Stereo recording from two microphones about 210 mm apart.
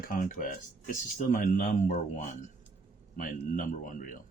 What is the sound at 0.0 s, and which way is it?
A man's voice, 40° left (ahead or behind).